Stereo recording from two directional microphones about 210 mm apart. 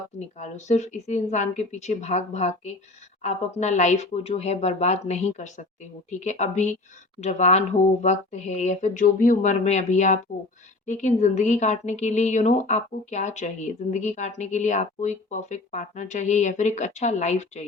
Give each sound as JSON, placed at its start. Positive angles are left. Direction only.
{"t": 0.2, "sound": "speech", "side_deg": 35}